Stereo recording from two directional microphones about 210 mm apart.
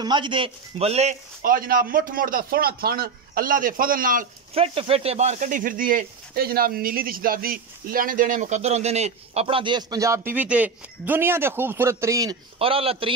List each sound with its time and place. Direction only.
0.0 s speech: 20° right (ahead or behind); by 4.3 s 40° right (ahead or behind)
4.6 s speech: 25° right (ahead or behind)
12.5 s a man's voice: 25° right (ahead or behind)